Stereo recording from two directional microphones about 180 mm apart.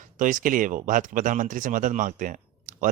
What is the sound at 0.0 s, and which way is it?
A man's voice, 45° right (ahead or behind).